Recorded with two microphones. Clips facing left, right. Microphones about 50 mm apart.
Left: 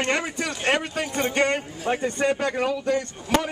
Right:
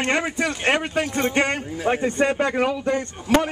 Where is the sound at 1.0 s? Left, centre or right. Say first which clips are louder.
Right 1 dB; centre.